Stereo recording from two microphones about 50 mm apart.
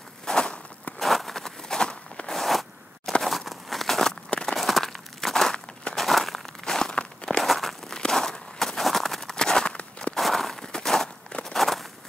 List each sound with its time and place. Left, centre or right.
0.2 s walk: centre
0.9 s a sound: centre
2.3 s a sound: centre
4.5 s crumpling: centre
5.9 s crushing: centre
6.6 s a sound: centre
7.4 s walk: centre
7.9 s walk: centre
10.1 s walk: centre